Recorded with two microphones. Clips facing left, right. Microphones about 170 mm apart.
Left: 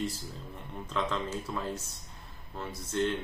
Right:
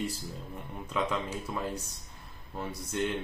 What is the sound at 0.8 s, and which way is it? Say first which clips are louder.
Speech: right 1 dB; 10° right (ahead or behind).